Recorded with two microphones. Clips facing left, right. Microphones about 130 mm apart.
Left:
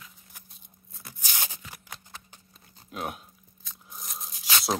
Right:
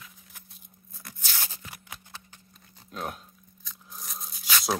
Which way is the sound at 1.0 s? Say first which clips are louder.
Left 1 dB; 15° left (ahead or behind).